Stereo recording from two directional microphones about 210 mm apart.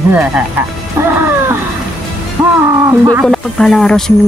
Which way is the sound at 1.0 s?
10° right (ahead or behind).